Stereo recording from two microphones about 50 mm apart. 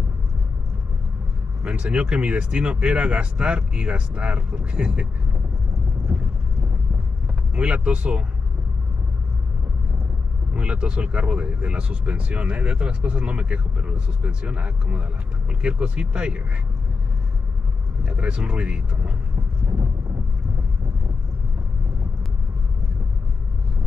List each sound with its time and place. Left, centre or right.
1.6 s speech: centre
6.1 s vehicle: right
7.5 s speech: right
10.5 s speech: right
18.0 s speech: right